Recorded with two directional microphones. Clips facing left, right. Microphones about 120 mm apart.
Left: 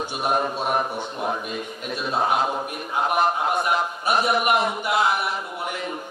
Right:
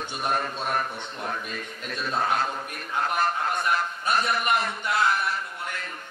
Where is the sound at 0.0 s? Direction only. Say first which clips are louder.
Left 5 dB; 15° left (ahead or behind).